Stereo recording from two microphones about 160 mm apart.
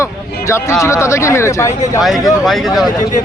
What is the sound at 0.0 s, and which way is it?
Speech, 20° left (ahead or behind).